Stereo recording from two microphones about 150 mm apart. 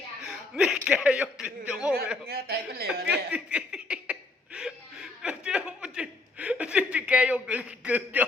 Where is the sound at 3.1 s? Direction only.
5° right (ahead or behind).